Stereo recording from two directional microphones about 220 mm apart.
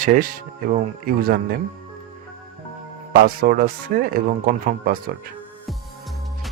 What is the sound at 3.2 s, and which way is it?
Speech, 40° right (ahead or behind).